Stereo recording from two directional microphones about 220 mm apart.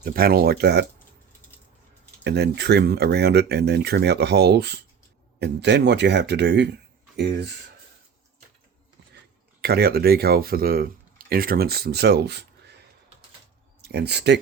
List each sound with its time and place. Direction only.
0.0 s speech: 40° right (ahead or behind)
2.2 s speech: 50° right (ahead or behind)
9.6 s speech: 45° right (ahead or behind)
13.8 s speech: 50° right (ahead or behind)